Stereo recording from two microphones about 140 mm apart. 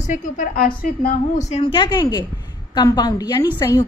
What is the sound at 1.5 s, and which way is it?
A woman's voice, 40° left (ahead or behind).